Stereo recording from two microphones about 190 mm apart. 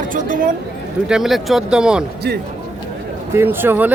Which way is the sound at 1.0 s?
5° right (ahead or behind).